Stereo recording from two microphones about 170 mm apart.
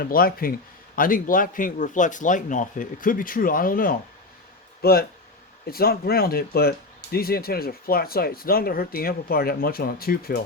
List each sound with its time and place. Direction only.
0.0 s speech: 60° left (ahead or behind)